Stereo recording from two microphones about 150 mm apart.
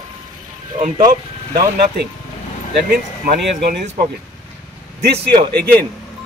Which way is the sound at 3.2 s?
85° right.